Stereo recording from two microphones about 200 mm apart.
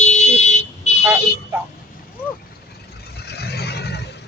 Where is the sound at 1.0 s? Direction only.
10° right (ahead or behind).